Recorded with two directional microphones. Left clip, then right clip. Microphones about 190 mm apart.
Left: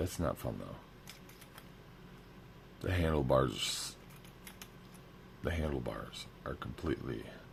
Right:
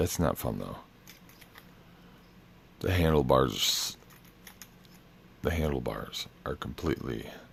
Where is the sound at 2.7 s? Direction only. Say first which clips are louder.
Right 8 dB; 40° right (ahead or behind).